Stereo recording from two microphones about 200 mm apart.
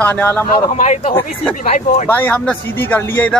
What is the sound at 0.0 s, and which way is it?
Speech, 10° left (ahead or behind).